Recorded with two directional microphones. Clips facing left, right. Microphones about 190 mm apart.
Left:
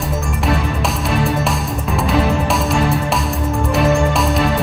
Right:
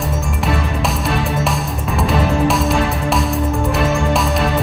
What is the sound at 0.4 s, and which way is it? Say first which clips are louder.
Music: left 1 dB; centre (ahead or behind).